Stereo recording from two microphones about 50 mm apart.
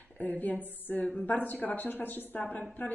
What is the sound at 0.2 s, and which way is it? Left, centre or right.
A woman's voice, left.